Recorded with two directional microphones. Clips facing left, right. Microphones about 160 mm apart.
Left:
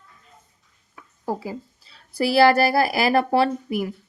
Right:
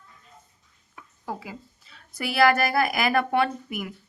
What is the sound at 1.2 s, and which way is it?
A woman's voice, 35° left (ahead or behind).